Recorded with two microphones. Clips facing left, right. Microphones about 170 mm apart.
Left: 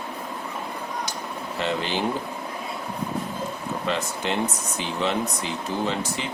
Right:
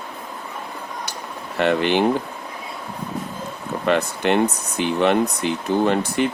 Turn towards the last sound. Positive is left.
turn(degrees=-60)  # may be behind; listen again after turning